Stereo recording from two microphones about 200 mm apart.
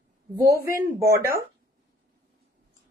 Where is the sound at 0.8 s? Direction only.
15° right (ahead or behind).